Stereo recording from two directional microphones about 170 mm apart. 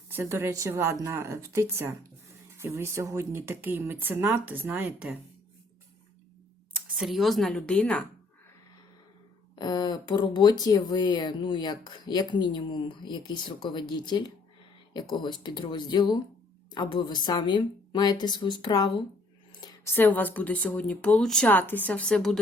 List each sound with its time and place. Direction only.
0.1 s speech: 15° right (ahead or behind)
6.9 s a woman's voice: centre (ahead or behind)
9.6 s a woman's voice: 25° left (ahead or behind)
19.6 s speech: 15° left (ahead or behind)